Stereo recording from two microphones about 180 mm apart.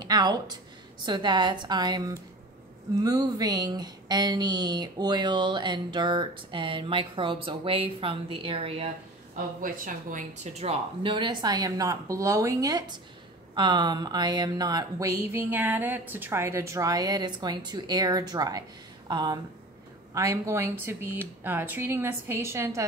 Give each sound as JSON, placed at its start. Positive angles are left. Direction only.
{"t": 0.0, "sound": "a woman's voice", "side_deg": -20}
{"t": 9.6, "sound": "a woman's voice", "side_deg": -50}